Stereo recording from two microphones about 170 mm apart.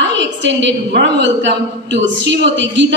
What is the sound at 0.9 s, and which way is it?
A woman's voice, 85° right.